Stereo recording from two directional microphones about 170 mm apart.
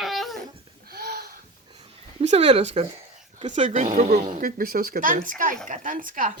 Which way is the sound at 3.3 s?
40° right (ahead or behind).